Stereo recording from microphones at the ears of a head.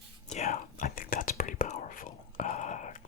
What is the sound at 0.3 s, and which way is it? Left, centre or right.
Whispering, left.